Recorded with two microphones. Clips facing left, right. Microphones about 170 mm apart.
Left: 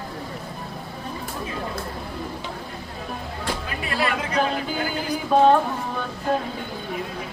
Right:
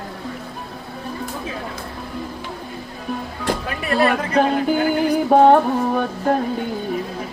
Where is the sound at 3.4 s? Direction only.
55° right (ahead or behind).